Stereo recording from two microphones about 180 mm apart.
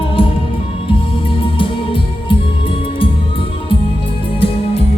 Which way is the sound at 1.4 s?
30° left (ahead or behind).